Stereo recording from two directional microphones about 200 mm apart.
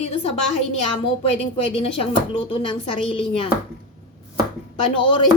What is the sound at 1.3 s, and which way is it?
Speech, 30° left (ahead or behind).